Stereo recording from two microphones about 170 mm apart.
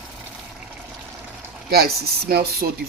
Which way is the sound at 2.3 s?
65° right (ahead or behind).